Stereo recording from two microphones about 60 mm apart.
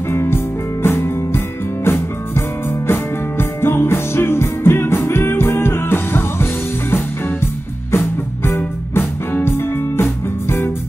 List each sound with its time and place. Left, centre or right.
0.1 s music: left